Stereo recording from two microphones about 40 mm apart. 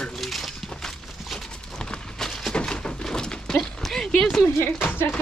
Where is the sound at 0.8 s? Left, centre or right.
Centre.